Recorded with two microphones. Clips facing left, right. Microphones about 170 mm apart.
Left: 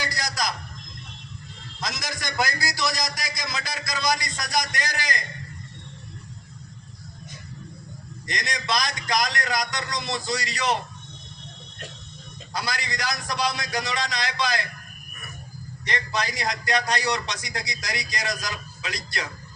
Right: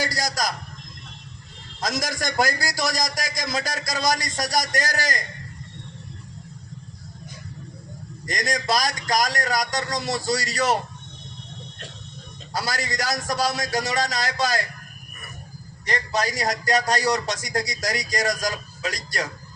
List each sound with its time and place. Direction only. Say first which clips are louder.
0.0 s a sound: right 3 dB; 45° right (ahead or behind)
1.8 s a man's voice: right 6 dB; 45° right (ahead or behind)
8.3 s a man's voice: right 4 dB; 45° right (ahead or behind)
12.5 s a man's voice: right 3 dB; 40° right (ahead or behind)
15.9 s a man's voice: right 3 dB; 40° right (ahead or behind)